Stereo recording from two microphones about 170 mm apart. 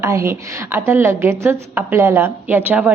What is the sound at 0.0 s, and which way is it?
A woman's voice, 15° right (ahead or behind).